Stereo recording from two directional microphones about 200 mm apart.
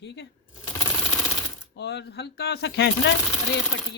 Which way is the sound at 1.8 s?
55° left (ahead or behind).